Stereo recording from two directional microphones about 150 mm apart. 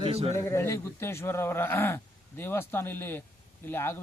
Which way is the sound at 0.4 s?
20° left (ahead or behind).